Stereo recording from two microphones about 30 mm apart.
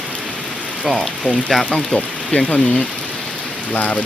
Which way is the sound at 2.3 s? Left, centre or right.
Left.